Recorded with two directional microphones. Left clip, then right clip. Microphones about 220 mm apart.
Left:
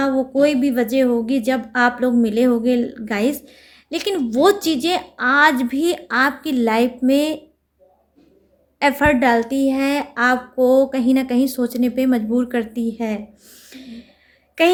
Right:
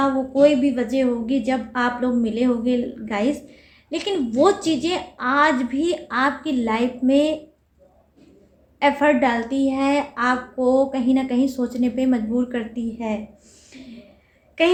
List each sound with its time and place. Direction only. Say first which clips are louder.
0.0 s a woman's voice: even; 50° left (ahead or behind)
8.8 s a woman's voice: left 2 dB; 50° left (ahead or behind)
13.7 s a sound: left 4 dB; 50° left (ahead or behind)
14.6 s a woman's voice: left 3 dB; 50° left (ahead or behind)